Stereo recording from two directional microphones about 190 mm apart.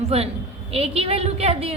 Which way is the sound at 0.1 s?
35° right (ahead or behind).